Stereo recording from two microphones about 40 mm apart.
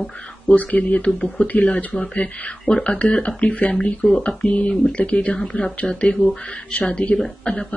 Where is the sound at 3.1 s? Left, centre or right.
Left.